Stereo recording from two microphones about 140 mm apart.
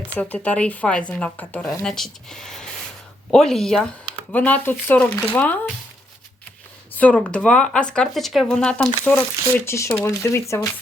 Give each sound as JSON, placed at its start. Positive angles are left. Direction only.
{"t": 0.2, "sound": "speech", "side_deg": 10}
{"t": 6.9, "sound": "speech", "side_deg": 10}